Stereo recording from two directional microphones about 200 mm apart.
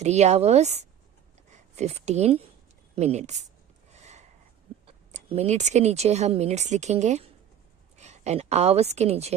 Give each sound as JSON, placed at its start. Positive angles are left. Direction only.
{"t": 0.0, "sound": "speech", "side_deg": -35}
{"t": 3.9, "sound": "a sound", "side_deg": -35}
{"t": 5.1, "sound": "a woman's voice", "side_deg": -35}